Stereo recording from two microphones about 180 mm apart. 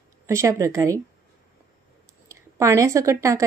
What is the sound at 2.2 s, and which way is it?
A woman's voice, 15° right (ahead or behind).